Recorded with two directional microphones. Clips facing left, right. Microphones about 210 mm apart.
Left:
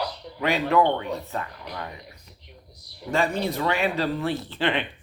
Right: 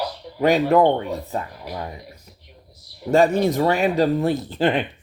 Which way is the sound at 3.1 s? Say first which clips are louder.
Right 8 dB; 45° right (ahead or behind).